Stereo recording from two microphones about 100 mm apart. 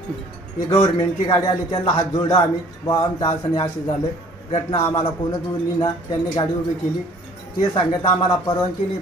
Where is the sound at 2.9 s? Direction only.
45° left (ahead or behind).